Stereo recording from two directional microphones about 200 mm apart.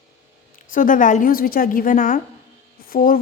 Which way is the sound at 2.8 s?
45° left (ahead or behind).